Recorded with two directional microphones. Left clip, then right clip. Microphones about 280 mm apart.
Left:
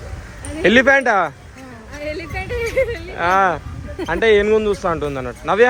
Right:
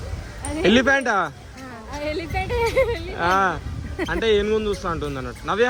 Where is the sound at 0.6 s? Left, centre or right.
Centre.